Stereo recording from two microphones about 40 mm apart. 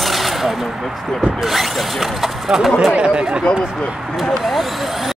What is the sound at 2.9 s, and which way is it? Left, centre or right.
Speech, right.